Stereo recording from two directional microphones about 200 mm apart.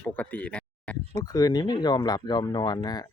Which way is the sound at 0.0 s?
10° left (ahead or behind).